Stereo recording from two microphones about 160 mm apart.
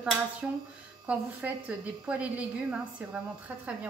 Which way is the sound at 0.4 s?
5° right (ahead or behind).